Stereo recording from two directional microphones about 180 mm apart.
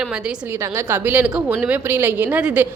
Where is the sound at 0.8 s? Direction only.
10° right (ahead or behind).